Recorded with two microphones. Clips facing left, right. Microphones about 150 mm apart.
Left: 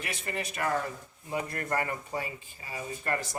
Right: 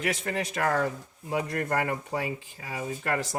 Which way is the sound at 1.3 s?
80° right.